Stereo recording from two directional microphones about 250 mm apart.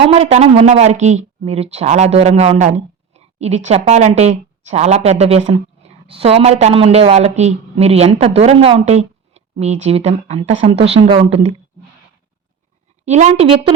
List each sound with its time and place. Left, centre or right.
0.0 s speech: right
13.1 s speech: right